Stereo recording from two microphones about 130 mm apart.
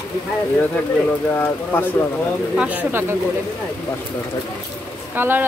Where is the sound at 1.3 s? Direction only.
15° left (ahead or behind).